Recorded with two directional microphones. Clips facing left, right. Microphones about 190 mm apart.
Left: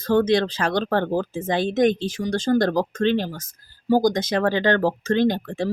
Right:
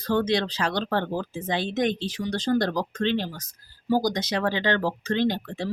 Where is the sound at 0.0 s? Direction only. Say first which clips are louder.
Left 5 dB; 50° left (ahead or behind).